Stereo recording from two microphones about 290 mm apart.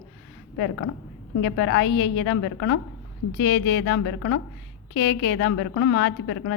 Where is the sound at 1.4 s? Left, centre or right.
Left.